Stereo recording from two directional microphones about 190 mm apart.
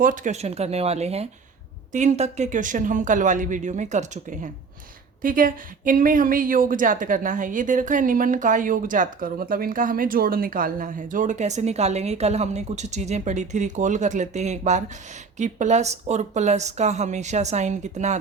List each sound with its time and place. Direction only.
0.0 s a woman's voice: 45° right (ahead or behind)